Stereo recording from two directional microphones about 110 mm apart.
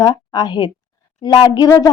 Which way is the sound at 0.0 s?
40° left (ahead or behind).